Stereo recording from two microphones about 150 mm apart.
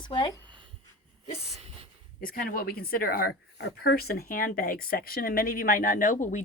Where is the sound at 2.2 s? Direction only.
75° left (ahead or behind).